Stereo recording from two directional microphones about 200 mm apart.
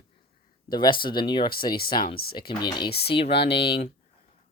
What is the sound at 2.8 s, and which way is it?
Speech, 55° left (ahead or behind).